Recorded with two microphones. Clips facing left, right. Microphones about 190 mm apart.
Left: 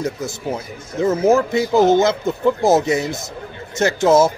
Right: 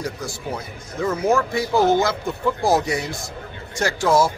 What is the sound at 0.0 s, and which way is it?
Speech, 25° left (ahead or behind).